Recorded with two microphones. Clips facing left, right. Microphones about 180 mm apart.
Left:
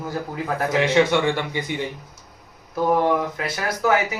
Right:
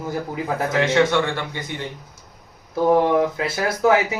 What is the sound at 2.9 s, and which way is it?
Speech, 25° right (ahead or behind).